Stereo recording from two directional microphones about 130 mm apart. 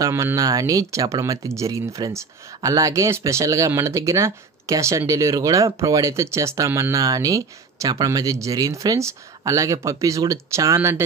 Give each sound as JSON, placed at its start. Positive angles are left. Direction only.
{"t": 0.0, "sound": "speech", "side_deg": -20}